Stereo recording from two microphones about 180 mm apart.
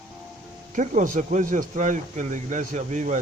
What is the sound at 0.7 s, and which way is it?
Speech, 45° right (ahead or behind).